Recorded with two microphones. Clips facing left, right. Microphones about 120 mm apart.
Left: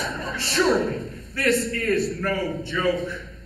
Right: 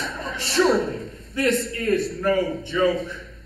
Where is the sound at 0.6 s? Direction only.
20° right (ahead or behind).